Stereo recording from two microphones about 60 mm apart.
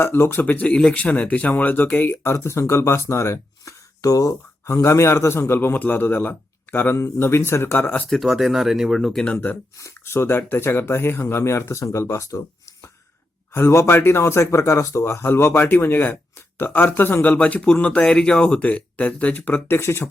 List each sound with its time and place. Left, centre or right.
0.0 s a man's voice: left
0.4 s speech: left
2.2 s speech: left
4.0 s speech: left
4.6 s a man's voice: left
6.9 s speech: left
8.1 s speech: centre
9.0 s speech: centre
10.1 s speech: left
13.5 s speech: left
15.2 s speech: left
15.5 s a man's voice: left
17.2 s speech: left
19.6 s speech: left